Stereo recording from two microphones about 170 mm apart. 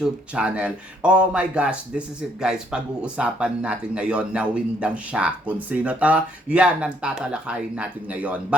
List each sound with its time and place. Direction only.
0.0 s speech: 5° right (ahead or behind)